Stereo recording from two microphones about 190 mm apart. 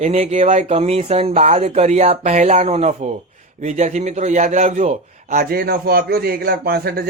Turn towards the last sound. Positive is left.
turn(degrees=-55)  # may be behind; listen again after turning